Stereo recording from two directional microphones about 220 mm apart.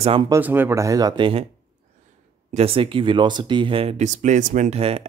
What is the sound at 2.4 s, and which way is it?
Speech, 25° right (ahead or behind).